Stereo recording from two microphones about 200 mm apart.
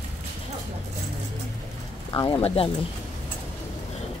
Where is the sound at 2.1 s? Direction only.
20° left (ahead or behind).